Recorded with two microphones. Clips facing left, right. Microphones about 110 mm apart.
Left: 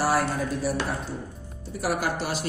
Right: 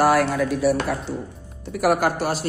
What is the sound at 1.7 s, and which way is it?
Speech, 60° right (ahead or behind).